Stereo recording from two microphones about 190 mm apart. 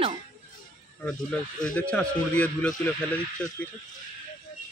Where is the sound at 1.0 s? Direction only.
5° left (ahead or behind).